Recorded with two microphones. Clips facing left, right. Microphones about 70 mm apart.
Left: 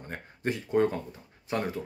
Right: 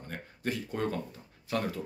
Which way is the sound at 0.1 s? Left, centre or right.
Left.